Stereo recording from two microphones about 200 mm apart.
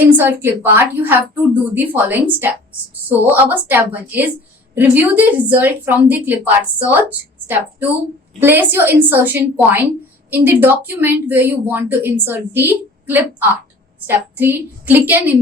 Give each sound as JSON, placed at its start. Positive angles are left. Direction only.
{"t": 0.2, "sound": "a woman's voice", "side_deg": -10}